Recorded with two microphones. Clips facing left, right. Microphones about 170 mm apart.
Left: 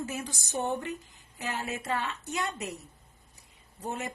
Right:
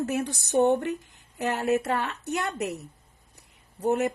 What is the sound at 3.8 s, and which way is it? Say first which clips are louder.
Speech: right 11 dB; 65° right (ahead or behind).